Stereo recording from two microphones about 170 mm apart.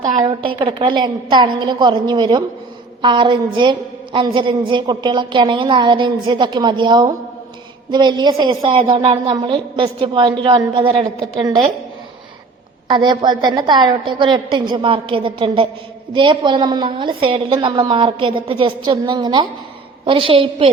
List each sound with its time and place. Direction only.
0.0 s a woman's voice: 30° right (ahead or behind)
12.9 s a woman's voice: 25° right (ahead or behind)